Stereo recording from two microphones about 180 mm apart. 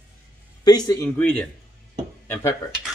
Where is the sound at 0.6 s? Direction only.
20° left (ahead or behind).